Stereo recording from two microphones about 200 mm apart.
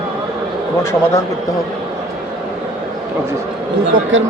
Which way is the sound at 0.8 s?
15° left (ahead or behind).